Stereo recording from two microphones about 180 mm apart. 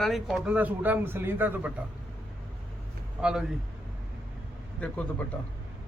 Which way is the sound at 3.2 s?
5° right (ahead or behind).